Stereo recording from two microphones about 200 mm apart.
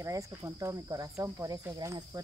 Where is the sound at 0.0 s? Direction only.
15° right (ahead or behind).